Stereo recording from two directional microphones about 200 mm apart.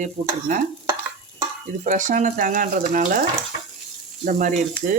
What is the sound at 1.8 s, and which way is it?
Speech, 40° right (ahead or behind).